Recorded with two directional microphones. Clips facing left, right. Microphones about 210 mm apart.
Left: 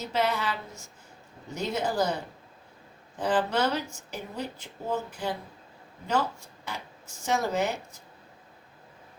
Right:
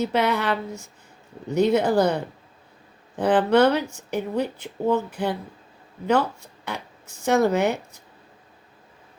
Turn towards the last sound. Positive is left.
turn(degrees=-60)  # may be behind; listen again after turning